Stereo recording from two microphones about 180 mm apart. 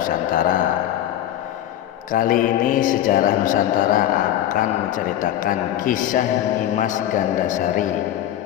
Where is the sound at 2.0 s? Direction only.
50° left (ahead or behind).